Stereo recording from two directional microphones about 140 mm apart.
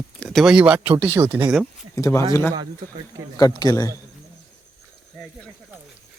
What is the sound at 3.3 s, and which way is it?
Speech, 30° left (ahead or behind).